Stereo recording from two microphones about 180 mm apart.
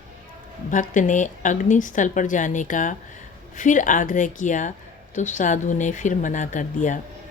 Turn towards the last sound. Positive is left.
turn(degrees=45)  # may be behind; listen again after turning